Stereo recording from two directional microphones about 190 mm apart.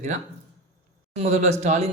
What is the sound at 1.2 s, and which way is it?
Speech, 35° right (ahead or behind).